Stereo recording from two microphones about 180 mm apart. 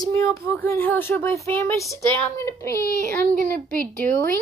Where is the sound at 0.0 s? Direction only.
15° left (ahead or behind).